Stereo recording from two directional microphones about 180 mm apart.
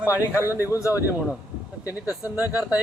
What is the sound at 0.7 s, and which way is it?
Speech, 15° left (ahead or behind).